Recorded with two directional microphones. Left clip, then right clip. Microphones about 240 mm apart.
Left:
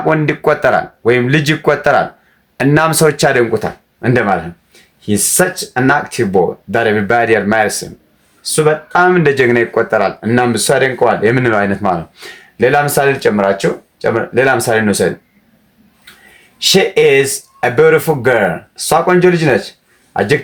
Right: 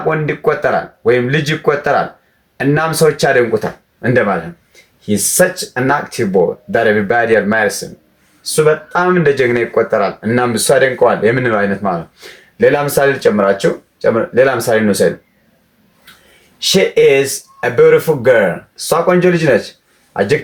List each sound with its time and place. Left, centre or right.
0.1 s speech: left
16.6 s speech: left